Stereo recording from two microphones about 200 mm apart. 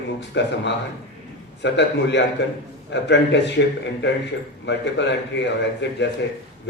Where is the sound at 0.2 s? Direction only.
60° left (ahead or behind).